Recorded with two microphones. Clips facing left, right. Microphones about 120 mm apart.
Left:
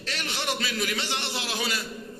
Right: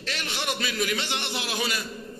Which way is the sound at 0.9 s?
30° left (ahead or behind).